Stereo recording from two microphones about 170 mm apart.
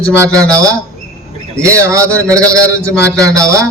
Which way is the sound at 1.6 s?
15° right (ahead or behind).